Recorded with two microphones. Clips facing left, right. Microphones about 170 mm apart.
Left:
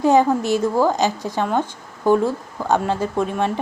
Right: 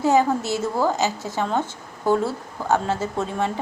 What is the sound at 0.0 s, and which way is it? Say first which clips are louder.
A woman's voice: left 3 dB; 15° left (ahead or behind).